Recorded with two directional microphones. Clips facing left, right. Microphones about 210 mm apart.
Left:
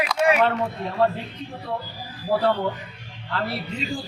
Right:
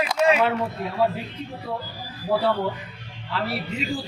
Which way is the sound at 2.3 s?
Centre (ahead or behind).